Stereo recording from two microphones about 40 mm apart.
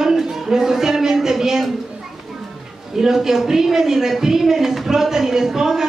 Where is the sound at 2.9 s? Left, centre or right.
Centre.